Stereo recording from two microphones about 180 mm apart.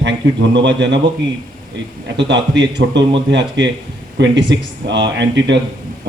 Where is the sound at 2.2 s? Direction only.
75° right (ahead or behind).